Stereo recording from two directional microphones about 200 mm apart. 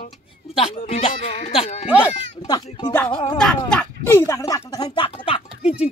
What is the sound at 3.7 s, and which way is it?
Speech, 5° left (ahead or behind).